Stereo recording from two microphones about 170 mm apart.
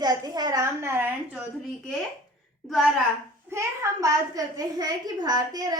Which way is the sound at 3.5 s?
20° right (ahead or behind).